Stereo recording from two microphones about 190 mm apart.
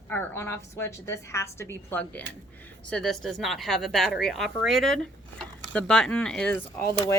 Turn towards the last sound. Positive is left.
turn(degrees=10)  # may be behind; listen again after turning